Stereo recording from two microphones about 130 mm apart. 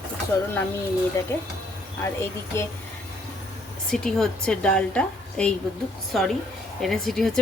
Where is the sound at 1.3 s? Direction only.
20° left (ahead or behind).